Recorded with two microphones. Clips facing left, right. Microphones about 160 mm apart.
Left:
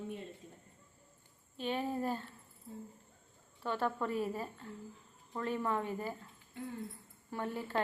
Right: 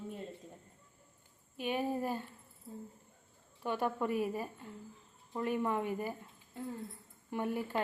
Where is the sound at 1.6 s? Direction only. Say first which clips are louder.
Right 1 dB; 10° right (ahead or behind).